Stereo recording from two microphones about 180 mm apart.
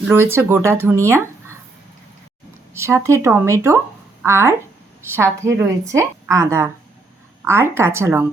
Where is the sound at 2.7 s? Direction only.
15° right (ahead or behind).